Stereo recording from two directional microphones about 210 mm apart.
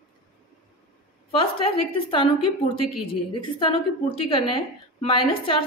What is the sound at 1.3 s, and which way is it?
A woman's voice, 25° left (ahead or behind).